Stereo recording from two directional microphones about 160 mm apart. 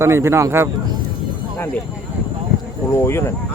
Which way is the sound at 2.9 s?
15° left (ahead or behind).